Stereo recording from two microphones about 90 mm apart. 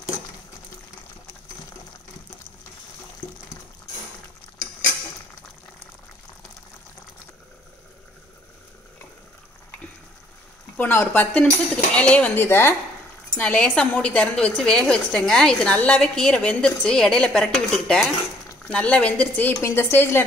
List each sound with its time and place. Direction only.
10.8 s a woman's voice: 20° left (ahead or behind)
13.4 s a woman's voice: 15° left (ahead or behind)